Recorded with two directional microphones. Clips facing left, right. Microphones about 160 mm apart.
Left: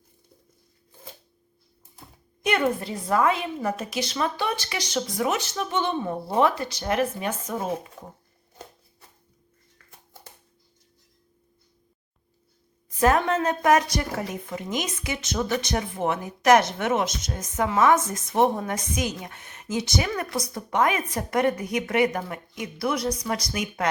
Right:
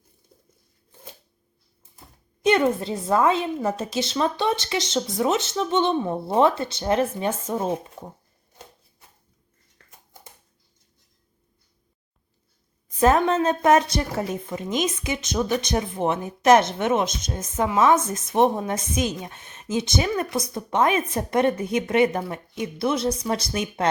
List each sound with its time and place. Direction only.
2.4 s a woman's voice: 25° right (ahead or behind)
12.9 s a woman's voice: 20° right (ahead or behind)